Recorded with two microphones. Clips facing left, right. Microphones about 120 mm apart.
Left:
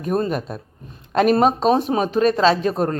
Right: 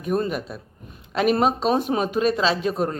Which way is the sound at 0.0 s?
40° left (ahead or behind).